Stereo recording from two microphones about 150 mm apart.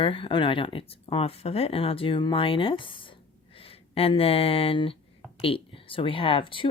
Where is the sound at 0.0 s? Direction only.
35° left (ahead or behind).